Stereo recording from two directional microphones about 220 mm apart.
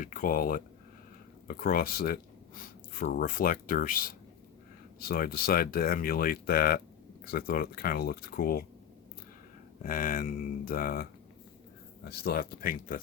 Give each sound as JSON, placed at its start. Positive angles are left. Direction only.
{"t": 0.0, "sound": "speech", "side_deg": 40}
{"t": 9.8, "sound": "speech", "side_deg": 40}